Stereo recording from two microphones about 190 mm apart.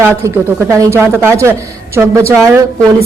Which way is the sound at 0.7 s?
15° right (ahead or behind).